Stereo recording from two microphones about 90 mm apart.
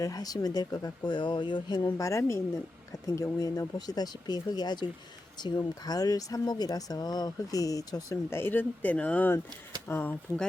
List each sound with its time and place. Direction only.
0.0 s speech: 45° left (ahead or behind); by 1.8 s 60° left (ahead or behind)
1.8 s speech: 35° left (ahead or behind)
8.3 s speech: 25° left (ahead or behind)